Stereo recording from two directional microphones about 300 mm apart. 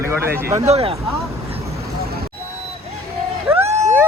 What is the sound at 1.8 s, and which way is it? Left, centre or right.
Vehicle, right.